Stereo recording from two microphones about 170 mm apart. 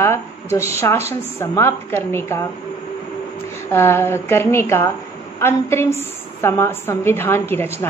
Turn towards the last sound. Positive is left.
turn(degrees=15)  # may be behind; listen again after turning